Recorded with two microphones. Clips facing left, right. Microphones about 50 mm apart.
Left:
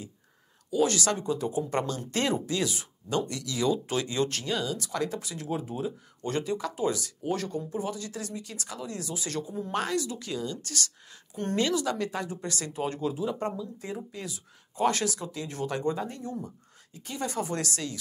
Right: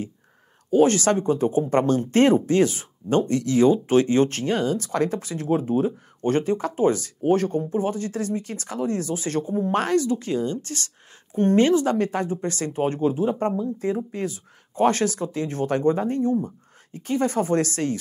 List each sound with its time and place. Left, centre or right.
0.7 s speech: right